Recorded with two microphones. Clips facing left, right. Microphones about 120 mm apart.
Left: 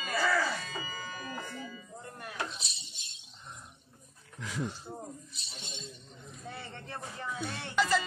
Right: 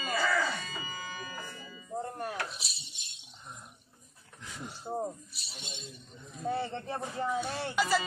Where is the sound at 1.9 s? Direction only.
40° right (ahead or behind).